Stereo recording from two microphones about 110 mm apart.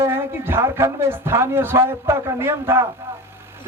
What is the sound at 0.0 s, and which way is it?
A man's voice, 20° right (ahead or behind).